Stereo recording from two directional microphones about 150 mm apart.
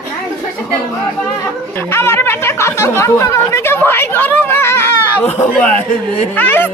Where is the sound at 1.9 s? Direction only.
15° left (ahead or behind).